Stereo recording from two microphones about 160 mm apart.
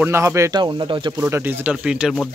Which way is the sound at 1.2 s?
15° right (ahead or behind).